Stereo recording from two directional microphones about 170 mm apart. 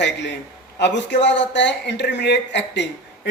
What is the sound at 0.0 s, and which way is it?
A man's voice, 90° left.